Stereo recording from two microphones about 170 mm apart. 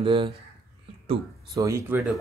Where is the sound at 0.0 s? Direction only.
30° right (ahead or behind).